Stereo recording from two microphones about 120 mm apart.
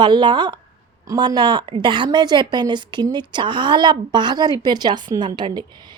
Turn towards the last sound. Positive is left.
turn(degrees=-40)  # may be behind; listen again after turning